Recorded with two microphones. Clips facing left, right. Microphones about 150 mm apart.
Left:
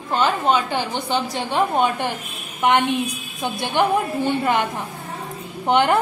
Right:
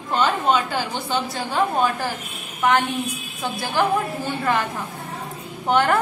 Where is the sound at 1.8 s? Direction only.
25° left (ahead or behind).